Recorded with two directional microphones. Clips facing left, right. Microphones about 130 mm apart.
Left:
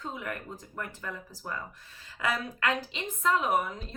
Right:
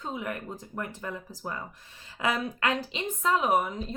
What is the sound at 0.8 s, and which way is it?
A woman's voice, 20° right (ahead or behind).